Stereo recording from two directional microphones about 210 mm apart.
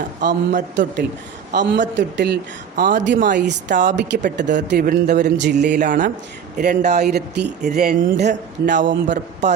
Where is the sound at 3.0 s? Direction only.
55° right (ahead or behind).